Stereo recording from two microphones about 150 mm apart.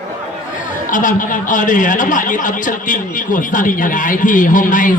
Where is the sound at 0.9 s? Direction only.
60° left (ahead or behind).